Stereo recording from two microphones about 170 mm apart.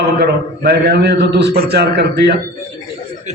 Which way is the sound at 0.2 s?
70° right (ahead or behind).